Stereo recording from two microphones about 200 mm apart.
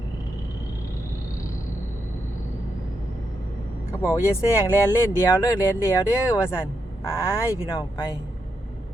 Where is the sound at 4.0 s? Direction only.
15° left (ahead or behind).